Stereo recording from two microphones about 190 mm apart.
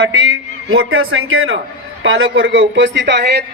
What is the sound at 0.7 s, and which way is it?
Speech, 90° right.